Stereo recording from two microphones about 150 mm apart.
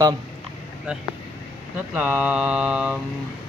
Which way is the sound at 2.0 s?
10° right (ahead or behind).